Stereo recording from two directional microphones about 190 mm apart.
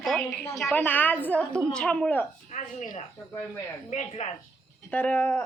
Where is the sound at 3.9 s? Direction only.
35° left (ahead or behind).